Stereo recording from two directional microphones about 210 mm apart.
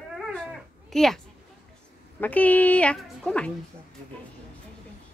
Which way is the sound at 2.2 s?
10° left (ahead or behind).